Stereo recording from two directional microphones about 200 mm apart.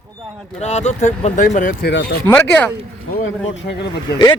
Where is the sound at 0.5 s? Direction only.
35° left (ahead or behind).